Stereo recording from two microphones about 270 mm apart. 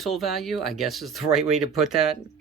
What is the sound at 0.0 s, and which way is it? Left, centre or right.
Speech, centre.